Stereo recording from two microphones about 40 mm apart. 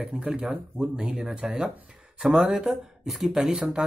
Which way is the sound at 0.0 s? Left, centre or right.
Right.